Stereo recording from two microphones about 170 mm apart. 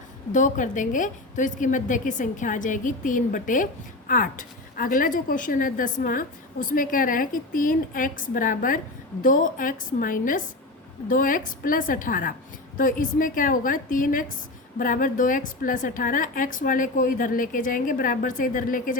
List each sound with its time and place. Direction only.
0.3 s a woman's voice: 45° left (ahead or behind)